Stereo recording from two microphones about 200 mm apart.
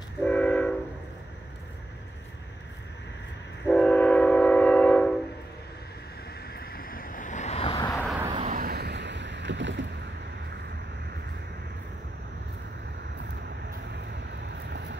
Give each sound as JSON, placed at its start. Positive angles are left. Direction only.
{"t": 0.2, "sound": "train", "side_deg": 5}
{"t": 3.6, "sound": "train", "side_deg": 5}
{"t": 6.4, "sound": "vehicle", "side_deg": 50}
{"t": 7.7, "sound": "vehicle", "side_deg": 15}
{"t": 8.4, "sound": "boat", "side_deg": -40}